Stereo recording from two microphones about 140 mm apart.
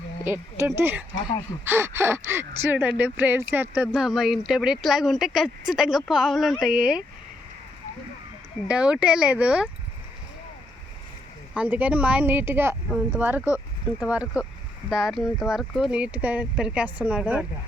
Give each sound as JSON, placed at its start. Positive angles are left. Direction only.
{"t": 0.3, "sound": "speech", "side_deg": -20}
{"t": 8.6, "sound": "speech", "side_deg": -5}
{"t": 11.5, "sound": "speech", "side_deg": -10}